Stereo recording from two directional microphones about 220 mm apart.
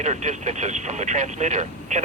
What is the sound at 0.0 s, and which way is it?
Speech, 30° right (ahead or behind).